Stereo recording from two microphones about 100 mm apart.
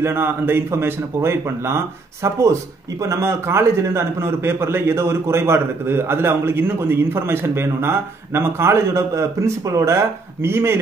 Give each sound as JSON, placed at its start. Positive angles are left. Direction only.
{"t": 0.0, "sound": "a man's voice", "side_deg": -25}